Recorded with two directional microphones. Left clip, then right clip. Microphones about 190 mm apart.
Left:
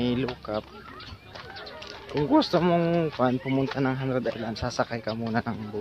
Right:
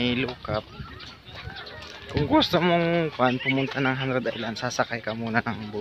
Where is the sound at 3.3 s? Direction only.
20° right (ahead or behind).